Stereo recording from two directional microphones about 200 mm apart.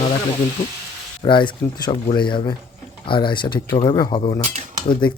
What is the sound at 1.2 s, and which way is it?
Speech, 25° left (ahead or behind).